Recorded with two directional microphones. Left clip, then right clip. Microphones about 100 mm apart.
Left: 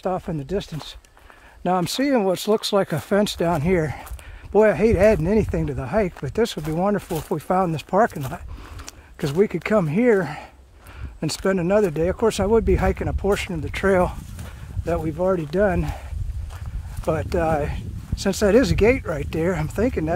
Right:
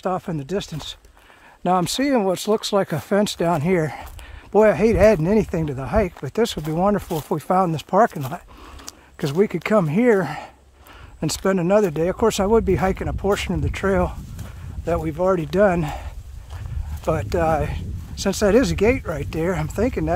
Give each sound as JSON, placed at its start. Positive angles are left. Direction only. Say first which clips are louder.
{"t": 0.0, "sound": "speech", "louder": "right 1 dB", "side_deg": -30}
{"t": 12.6, "sound": "speech", "louder": "right 1 dB", "side_deg": -20}
{"t": 13.7, "sound": "speech", "louder": "left 3 dB", "side_deg": -5}
{"t": 14.9, "sound": "speech", "louder": "right 1 dB", "side_deg": -35}
{"t": 15.1, "sound": "speech", "louder": "right 3 dB", "side_deg": -55}
{"t": 17.0, "sound": "speech", "louder": "right 1 dB", "side_deg": -35}